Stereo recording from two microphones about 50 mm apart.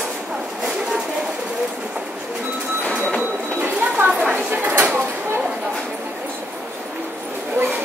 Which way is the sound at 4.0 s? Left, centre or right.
Right.